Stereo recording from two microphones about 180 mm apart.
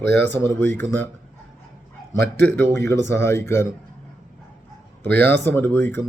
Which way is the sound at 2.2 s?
65° right (ahead or behind).